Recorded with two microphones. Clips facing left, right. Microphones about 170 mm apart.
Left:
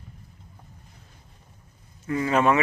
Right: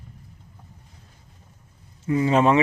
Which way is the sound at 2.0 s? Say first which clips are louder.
Right 3 dB; 20° right (ahead or behind).